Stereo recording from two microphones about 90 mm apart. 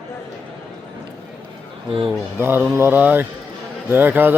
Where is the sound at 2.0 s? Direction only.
25° right (ahead or behind).